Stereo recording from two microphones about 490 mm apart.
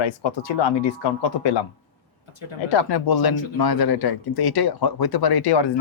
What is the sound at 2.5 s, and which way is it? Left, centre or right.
Speech, left.